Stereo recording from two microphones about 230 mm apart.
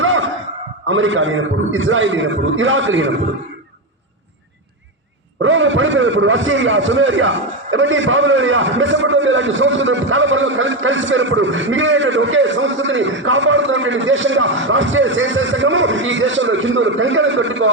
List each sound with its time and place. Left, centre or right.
0.0 s a sound: right
0.9 s a man's voice: right
5.4 s a man's voice: right